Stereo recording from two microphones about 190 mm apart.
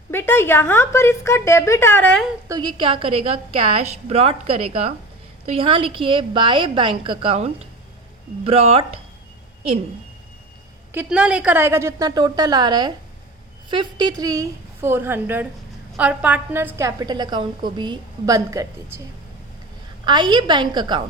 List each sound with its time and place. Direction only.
0.1 s a woman's voice: 10° left (ahead or behind)
2.5 s a woman's voice: 25° right (ahead or behind)
10.9 s a woman's voice: 5° right (ahead or behind); by 12.9 s 20° right (ahead or behind)
14.0 s a woman's voice: 20° right (ahead or behind)
20.1 s a woman's voice: 25° right (ahead or behind)